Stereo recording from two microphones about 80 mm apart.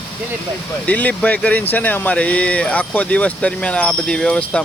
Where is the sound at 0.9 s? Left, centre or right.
Centre.